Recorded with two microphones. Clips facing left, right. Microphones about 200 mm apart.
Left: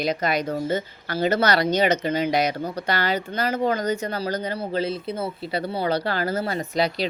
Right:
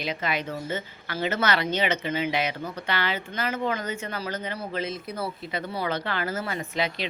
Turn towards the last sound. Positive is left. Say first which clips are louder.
# left 5 dB
turn(degrees=35)  # may be behind; listen again after turning